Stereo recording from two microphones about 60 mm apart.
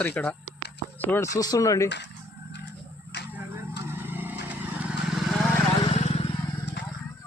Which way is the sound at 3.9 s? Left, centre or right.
Right.